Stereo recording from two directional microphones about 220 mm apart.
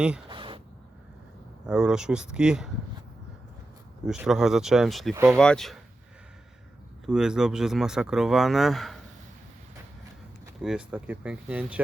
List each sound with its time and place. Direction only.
0.3 s a sound: 20° right (ahead or behind)
1.6 s speech: 5° right (ahead or behind)
4.0 s speech: centre (ahead or behind)
5.1 s speech: 10° right (ahead or behind)
5.4 s speech: centre (ahead or behind)
7.0 s speech: 5° right (ahead or behind)
10.6 s speech: 5° right (ahead or behind)